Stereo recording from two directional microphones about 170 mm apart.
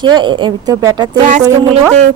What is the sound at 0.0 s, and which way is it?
Speech, 30° right (ahead or behind).